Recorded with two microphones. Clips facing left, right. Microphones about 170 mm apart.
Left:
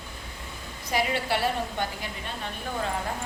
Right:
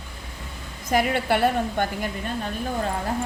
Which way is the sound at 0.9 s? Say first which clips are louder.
Right 5 dB; 50° right (ahead or behind).